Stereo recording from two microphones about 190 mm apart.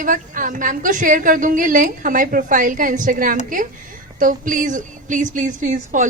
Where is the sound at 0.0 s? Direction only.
45° right (ahead or behind).